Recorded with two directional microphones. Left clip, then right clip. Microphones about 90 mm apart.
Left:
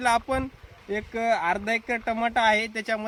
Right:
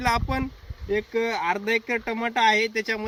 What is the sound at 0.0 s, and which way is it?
Speech, 30° left (ahead or behind).